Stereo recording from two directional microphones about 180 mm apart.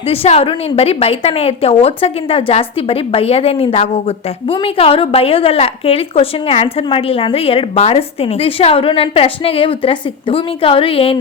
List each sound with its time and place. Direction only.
0.1 s a woman's voice: 35° left (ahead or behind)